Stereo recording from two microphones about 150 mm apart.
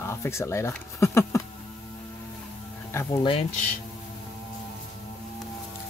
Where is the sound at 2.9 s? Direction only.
15° left (ahead or behind).